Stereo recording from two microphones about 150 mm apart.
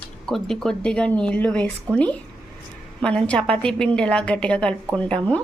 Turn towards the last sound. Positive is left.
turn(degrees=10)  # may be behind; listen again after turning